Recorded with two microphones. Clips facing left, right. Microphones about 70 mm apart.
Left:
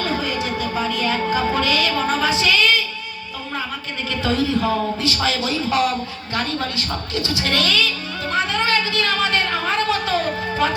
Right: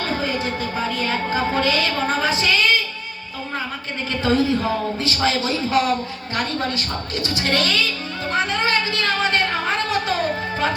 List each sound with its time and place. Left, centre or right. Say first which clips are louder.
0.0 s music: even; right
4.1 s speech: right 1 dB; right
8.3 s a sound: left 1 dB; right
10.6 s speech: left 1 dB; right